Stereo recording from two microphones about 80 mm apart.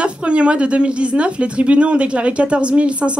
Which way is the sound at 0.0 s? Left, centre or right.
Centre.